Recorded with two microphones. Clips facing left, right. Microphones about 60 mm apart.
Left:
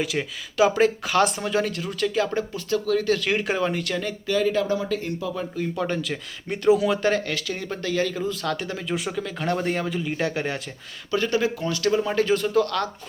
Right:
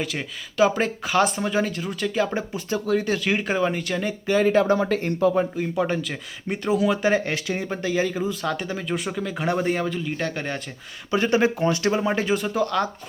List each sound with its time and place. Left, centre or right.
0.0 s speech: centre
3.2 s speech: centre
4.3 s speech: right
5.5 s speech: centre
6.0 s speech: centre
7.1 s speech: right
7.7 s speech: centre
11.1 s speech: right